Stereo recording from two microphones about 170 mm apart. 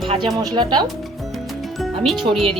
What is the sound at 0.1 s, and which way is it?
Speech, 25° right (ahead or behind).